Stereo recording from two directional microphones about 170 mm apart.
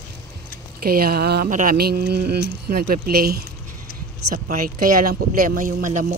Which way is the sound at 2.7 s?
60° right (ahead or behind).